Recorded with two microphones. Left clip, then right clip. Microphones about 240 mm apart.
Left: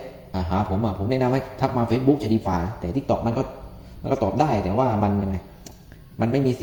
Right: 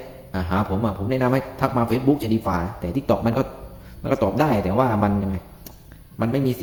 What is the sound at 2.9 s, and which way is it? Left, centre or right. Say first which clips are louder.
Speech: right 2 dB; centre.